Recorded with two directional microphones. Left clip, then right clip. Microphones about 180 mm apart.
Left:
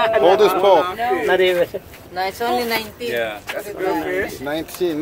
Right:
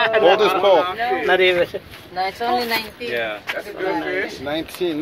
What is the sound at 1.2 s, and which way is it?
Speech, centre (ahead or behind).